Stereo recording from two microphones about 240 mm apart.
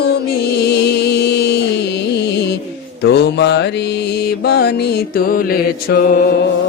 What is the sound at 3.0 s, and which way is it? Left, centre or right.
Mantra, left.